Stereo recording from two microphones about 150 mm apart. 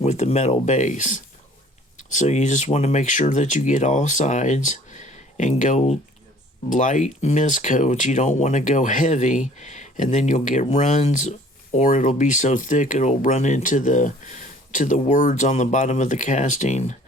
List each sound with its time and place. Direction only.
0.0 s speech: 50° left (ahead or behind)